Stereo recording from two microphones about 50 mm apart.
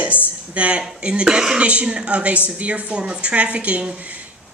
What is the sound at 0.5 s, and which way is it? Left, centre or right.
Speech, right.